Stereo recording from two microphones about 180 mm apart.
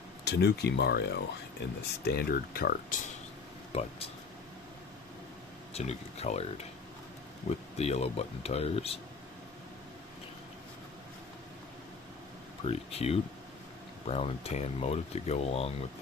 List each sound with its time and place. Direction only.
0.3 s speech: 65° left (ahead or behind)
3.7 s speech: 30° left (ahead or behind)
5.7 s speech: 35° left (ahead or behind)
12.6 s speech: 35° left (ahead or behind)